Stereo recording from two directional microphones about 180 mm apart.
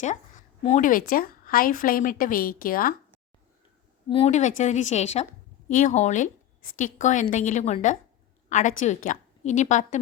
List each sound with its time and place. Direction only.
0.0 s a woman's voice: 40° left (ahead or behind)
4.1 s a woman's voice: 35° left (ahead or behind)